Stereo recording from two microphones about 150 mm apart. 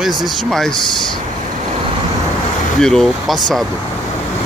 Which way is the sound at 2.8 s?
5° left (ahead or behind).